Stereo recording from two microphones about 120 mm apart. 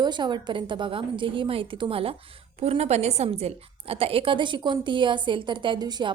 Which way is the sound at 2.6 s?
60° right (ahead or behind).